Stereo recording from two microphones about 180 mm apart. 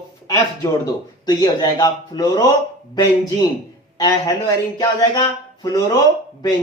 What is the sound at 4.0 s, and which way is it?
A man's voice, 20° left (ahead or behind).